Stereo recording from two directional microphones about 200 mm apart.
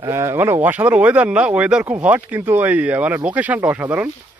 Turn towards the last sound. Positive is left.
turn(degrees=-10)  # may be behind; listen again after turning